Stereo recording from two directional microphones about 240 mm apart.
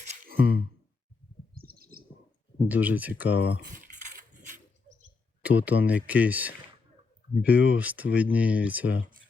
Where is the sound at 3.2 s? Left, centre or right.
Left.